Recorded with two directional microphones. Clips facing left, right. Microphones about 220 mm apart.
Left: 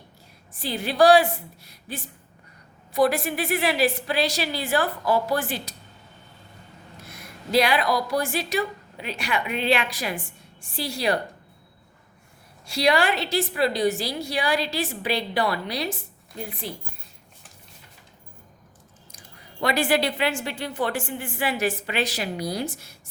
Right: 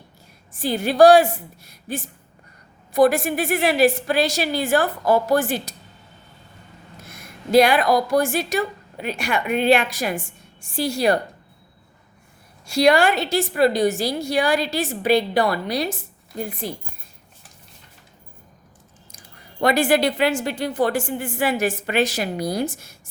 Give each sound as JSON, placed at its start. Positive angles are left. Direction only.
{"t": 0.5, "sound": "a woman's voice", "side_deg": -45}
{"t": 7.2, "sound": "a woman's voice", "side_deg": -45}
{"t": 12.6, "sound": "a woman's voice", "side_deg": -45}
{"t": 19.5, "sound": "a woman's voice", "side_deg": -45}